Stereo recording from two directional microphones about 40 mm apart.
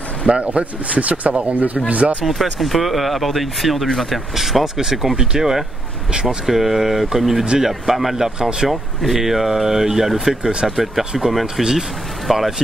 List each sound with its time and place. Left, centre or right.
0.3 s speech: right
2.2 s speech: centre
8.4 s speech: right
8.6 s speech: centre